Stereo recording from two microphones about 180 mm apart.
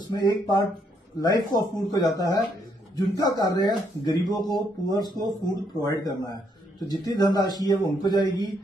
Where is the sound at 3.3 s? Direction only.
20° left (ahead or behind).